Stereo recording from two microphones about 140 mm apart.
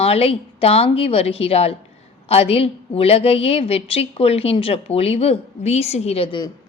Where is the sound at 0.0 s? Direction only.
45° left (ahead or behind).